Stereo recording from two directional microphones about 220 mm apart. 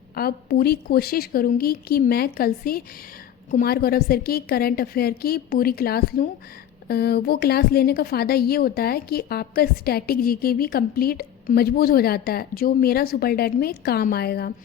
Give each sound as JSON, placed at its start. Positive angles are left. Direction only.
{"t": 0.2, "sound": "a woman's voice", "side_deg": 45}